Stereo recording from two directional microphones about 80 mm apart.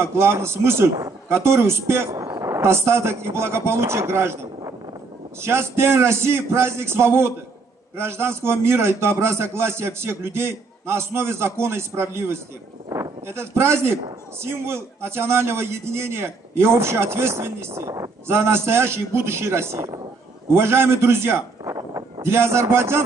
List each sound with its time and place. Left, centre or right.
0.0 s a man's voice: right